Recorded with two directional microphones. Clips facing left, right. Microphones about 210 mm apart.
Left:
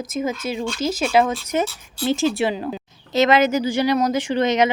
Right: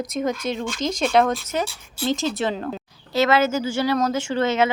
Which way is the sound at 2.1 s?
20° right (ahead or behind).